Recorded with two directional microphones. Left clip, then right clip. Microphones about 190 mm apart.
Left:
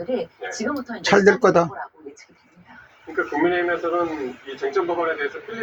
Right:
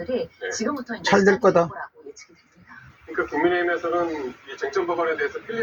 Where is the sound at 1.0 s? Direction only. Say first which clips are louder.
Left 2 dB; 40° left (ahead or behind).